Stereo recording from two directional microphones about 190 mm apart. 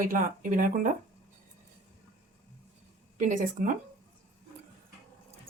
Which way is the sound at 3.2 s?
40° right (ahead or behind).